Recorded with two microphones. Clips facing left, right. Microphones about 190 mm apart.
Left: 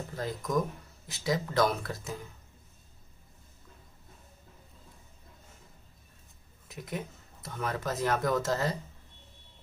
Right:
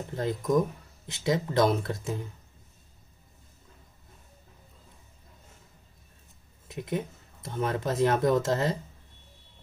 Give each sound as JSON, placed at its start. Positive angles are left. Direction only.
{"t": 0.1, "sound": "speech", "side_deg": -25}
{"t": 6.7, "sound": "speech", "side_deg": -25}